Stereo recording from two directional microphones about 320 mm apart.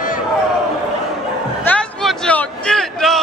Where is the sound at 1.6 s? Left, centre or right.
Centre.